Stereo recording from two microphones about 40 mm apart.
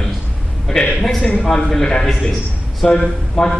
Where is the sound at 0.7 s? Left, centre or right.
Centre.